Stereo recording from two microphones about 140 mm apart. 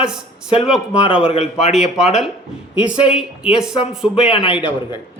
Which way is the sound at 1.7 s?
5° right (ahead or behind).